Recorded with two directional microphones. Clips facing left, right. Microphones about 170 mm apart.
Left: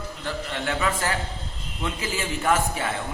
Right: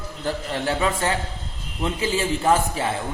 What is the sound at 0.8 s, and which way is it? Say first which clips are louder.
A man's voice: right 3 dB; 25° right (ahead or behind).